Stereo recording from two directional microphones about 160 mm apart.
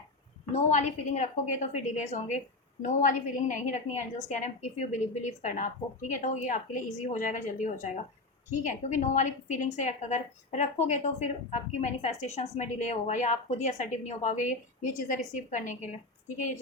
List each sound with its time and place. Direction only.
0.5 s a woman's voice: 50° left (ahead or behind)